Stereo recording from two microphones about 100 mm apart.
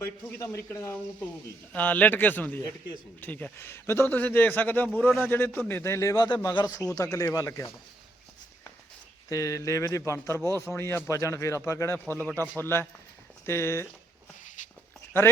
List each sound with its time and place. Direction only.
0.0 s a man's voice: 25° left (ahead or behind)
1.7 s a man's voice: 15° left (ahead or behind); by 6.2 s 30° left (ahead or behind)
6.5 s speech: 45° left (ahead or behind)
9.3 s a man's voice: 30° left (ahead or behind)